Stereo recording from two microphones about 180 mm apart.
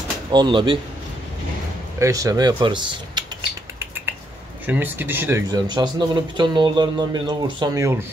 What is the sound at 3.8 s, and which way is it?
Finger snapping, 10° right (ahead or behind).